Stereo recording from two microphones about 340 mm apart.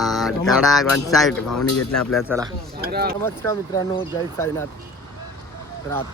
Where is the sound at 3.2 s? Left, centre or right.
Centre.